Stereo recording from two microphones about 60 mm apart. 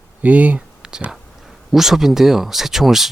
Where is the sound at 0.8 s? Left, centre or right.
Centre.